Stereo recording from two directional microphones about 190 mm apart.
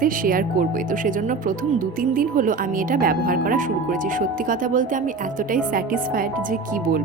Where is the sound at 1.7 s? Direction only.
45° right (ahead or behind).